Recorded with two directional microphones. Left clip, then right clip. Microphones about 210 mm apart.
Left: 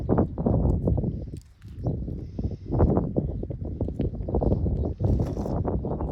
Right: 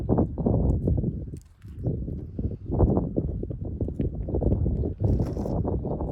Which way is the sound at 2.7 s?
30° right (ahead or behind).